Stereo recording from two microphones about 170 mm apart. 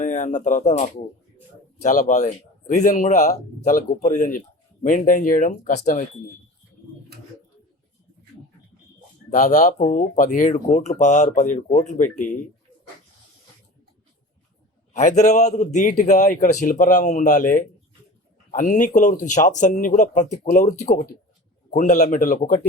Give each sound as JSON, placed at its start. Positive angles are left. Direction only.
{"t": 0.0, "sound": "speech", "side_deg": 45}
{"t": 9.3, "sound": "speech", "side_deg": 45}
{"t": 14.9, "sound": "speech", "side_deg": 45}